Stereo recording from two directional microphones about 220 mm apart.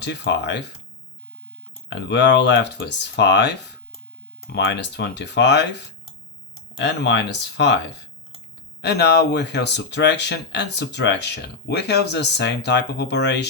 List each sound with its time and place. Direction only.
0.0 s speech: 50° left (ahead or behind)
1.9 s speech: 50° left (ahead or behind)